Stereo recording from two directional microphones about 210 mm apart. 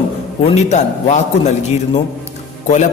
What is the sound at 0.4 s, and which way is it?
Speech, 30° left (ahead or behind).